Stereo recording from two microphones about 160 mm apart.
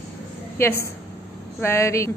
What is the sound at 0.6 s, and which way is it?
A woman's voice, 15° left (ahead or behind).